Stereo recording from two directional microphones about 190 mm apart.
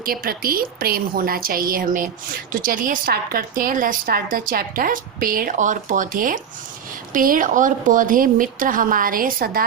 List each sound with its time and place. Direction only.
0.0 s speech: 50° right (ahead or behind)